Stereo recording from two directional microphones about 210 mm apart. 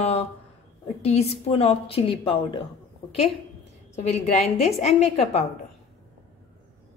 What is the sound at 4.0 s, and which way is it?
A woman's voice, 35° left (ahead or behind).